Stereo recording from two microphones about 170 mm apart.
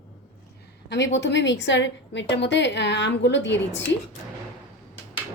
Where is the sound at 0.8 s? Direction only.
90° left.